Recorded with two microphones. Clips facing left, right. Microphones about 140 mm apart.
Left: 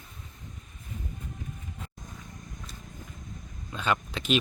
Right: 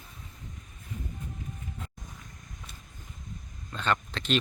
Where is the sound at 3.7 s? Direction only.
10° left (ahead or behind).